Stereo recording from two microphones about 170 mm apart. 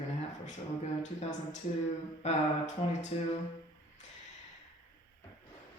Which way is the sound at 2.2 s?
40° left (ahead or behind).